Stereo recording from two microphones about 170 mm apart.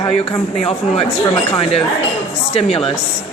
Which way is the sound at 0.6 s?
35° left (ahead or behind).